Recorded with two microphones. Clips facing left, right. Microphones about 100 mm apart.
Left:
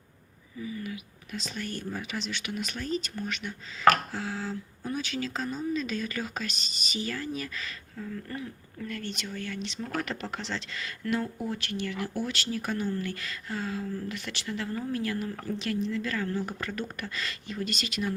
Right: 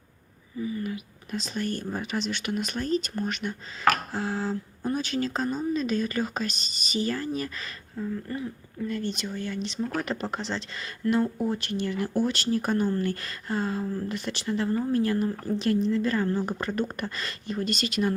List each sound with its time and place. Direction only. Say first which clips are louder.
0.6 s speech: right 5 dB; 40° right (ahead or behind)
7.9 s a woman's voice: right 6 dB; 25° right (ahead or behind); by 18.1 s 45° right (ahead or behind)